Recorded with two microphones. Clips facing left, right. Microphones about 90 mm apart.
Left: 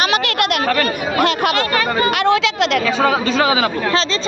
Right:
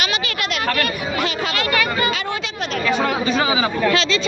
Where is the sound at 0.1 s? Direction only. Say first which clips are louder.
Left 7 dB; 60° left (ahead or behind).